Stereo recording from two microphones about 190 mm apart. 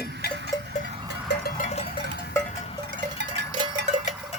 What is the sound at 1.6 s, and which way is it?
Sheep, 35° left (ahead or behind).